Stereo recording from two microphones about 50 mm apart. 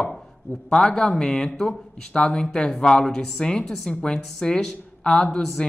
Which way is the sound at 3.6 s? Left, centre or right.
Centre.